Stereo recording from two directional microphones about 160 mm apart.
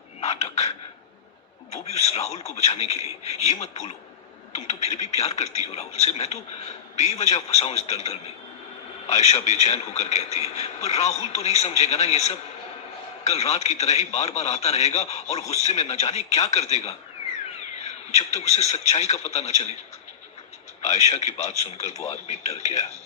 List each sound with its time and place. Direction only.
0.2 s a man's voice: 40° left (ahead or behind)
1.7 s a man's voice: 40° left (ahead or behind)
20.8 s a man's voice: 45° left (ahead or behind)